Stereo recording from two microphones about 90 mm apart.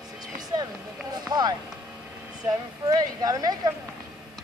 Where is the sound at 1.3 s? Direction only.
50° right (ahead or behind).